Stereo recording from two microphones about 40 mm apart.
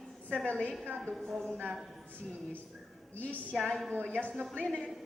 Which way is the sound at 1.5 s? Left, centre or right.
Left.